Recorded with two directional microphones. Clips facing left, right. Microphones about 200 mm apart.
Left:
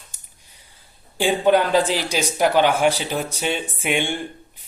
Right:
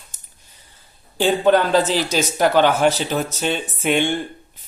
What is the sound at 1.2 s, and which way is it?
Speech, 10° left (ahead or behind).